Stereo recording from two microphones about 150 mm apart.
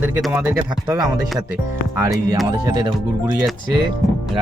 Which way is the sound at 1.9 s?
20° right (ahead or behind).